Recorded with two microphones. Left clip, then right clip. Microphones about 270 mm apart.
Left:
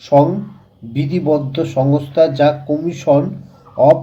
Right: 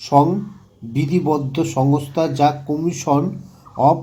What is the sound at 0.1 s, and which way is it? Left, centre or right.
Speech, centre.